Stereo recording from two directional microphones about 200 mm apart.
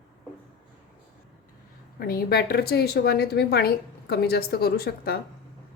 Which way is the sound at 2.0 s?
50° left (ahead or behind).